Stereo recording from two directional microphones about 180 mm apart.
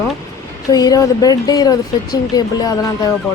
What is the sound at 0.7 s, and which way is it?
Speech, 20° left (ahead or behind).